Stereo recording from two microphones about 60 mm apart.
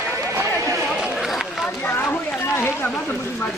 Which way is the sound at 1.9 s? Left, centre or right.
Left.